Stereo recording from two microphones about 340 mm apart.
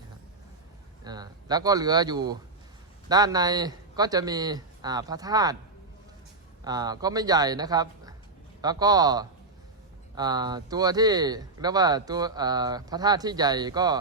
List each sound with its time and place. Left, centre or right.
1.0 s speech: centre
6.7 s speech: centre